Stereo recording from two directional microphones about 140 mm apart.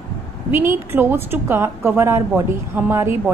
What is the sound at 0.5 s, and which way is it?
A woman's voice, 15° right (ahead or behind).